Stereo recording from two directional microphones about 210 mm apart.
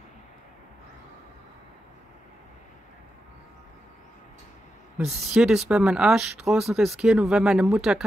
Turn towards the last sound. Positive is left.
turn(degrees=-5)  # may be behind; listen again after turning